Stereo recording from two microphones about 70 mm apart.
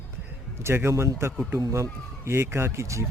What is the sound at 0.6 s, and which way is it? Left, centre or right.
Speech, right.